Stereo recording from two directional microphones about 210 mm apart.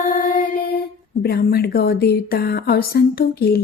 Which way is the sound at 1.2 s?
50° left (ahead or behind).